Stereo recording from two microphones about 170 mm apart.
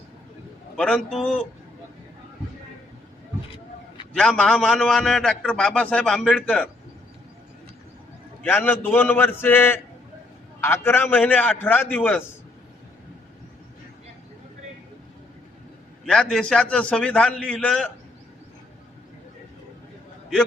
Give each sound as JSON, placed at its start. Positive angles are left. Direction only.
{"t": 0.8, "sound": "a man's voice", "side_deg": 5}
{"t": 4.1, "sound": "a man's voice", "side_deg": 5}
{"t": 8.4, "sound": "a man's voice", "side_deg": 10}
{"t": 16.0, "sound": "a man's voice", "side_deg": 5}